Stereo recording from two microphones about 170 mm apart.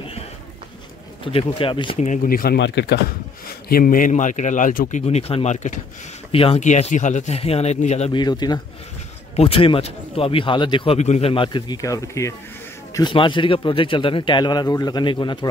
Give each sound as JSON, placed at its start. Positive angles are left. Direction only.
{"t": 1.2, "sound": "a man's voice", "side_deg": 30}
{"t": 2.0, "sound": "speech", "side_deg": 50}
{"t": 3.4, "sound": "a man's voice", "side_deg": 60}
{"t": 8.1, "sound": "a man's voice", "side_deg": 25}
{"t": 12.9, "sound": "a man's voice", "side_deg": 25}